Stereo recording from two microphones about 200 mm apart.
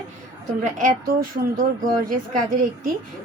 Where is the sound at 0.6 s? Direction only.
45° right (ahead or behind).